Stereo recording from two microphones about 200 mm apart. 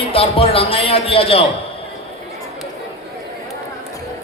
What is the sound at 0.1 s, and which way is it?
A man's voice, 30° left (ahead or behind).